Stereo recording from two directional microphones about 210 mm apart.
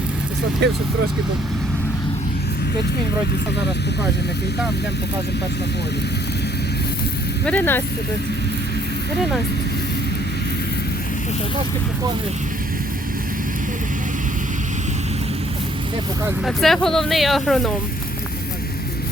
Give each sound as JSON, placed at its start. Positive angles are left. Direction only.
{"t": 0.6, "sound": "speech", "side_deg": -55}
{"t": 7.4, "sound": "speech", "side_deg": 10}
{"t": 16.5, "sound": "speech", "side_deg": 0}